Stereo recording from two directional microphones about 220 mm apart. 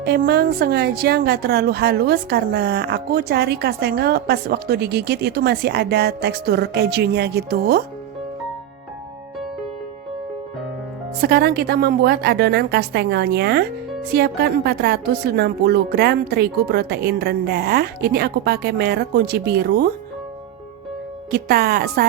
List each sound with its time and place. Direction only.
0.0 s speech: 45° right (ahead or behind)
11.2 s speech: 45° right (ahead or behind)
21.2 s speech: 45° right (ahead or behind)